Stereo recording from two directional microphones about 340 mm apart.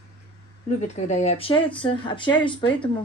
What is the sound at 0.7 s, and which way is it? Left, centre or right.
Speech, centre.